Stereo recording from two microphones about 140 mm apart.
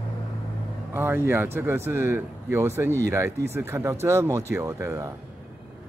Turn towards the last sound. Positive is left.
turn(degrees=-20)  # may be behind; listen again after turning